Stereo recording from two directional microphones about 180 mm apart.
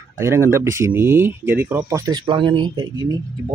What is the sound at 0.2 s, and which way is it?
Speech, 15° right (ahead or behind).